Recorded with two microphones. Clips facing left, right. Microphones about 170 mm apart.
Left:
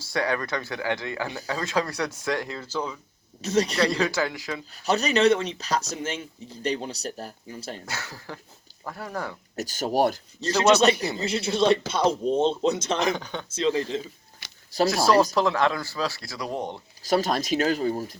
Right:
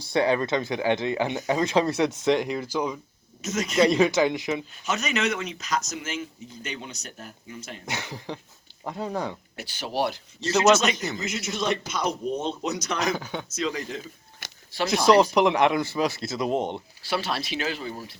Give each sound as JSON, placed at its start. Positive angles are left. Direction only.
{"t": 0.0, "sound": "speech", "side_deg": -20}
{"t": 3.4, "sound": "speech", "side_deg": 35}
{"t": 3.8, "sound": "speech", "side_deg": -20}
{"t": 4.7, "sound": "speech", "side_deg": 35}
{"t": 7.9, "sound": "speech", "side_deg": -20}
{"t": 9.6, "sound": "speech", "side_deg": 45}
{"t": 10.6, "sound": "speech", "side_deg": 35}
{"t": 13.1, "sound": "speech", "side_deg": -5}
{"t": 13.5, "sound": "speech", "side_deg": 25}
{"t": 14.4, "sound": "a sound", "side_deg": -45}
{"t": 14.8, "sound": "speech", "side_deg": -20}
{"t": 17.0, "sound": "speech", "side_deg": 40}